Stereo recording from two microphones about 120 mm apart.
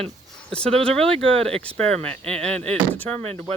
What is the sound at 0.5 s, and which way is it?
Speech, 5° left (ahead or behind).